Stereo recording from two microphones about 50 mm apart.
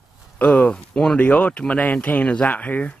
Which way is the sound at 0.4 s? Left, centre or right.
Left.